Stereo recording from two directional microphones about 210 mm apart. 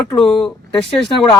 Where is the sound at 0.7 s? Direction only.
25° left (ahead or behind).